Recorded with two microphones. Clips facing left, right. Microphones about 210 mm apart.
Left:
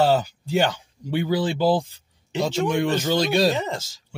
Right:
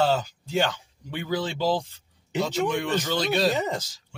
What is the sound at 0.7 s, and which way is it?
Speech, 15° left (ahead or behind).